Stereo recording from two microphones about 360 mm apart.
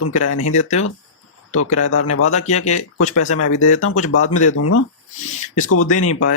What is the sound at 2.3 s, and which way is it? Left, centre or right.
Speech, centre.